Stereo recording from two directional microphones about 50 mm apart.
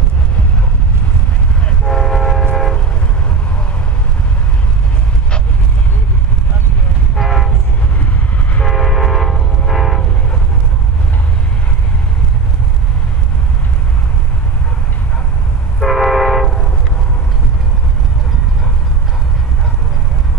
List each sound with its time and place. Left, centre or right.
1.9 s train: centre
7.2 s train: centre
8.6 s train: centre
15.8 s train: centre